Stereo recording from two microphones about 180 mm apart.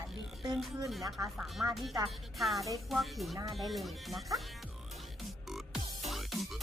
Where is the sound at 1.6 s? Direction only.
15° right (ahead or behind).